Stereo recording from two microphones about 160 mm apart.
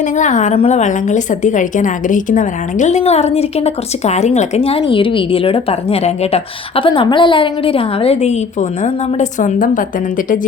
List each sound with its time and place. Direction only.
0.0 s a woman's voice: 50° left (ahead or behind)